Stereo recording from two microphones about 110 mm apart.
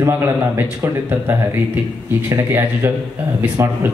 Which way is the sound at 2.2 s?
25° right (ahead or behind).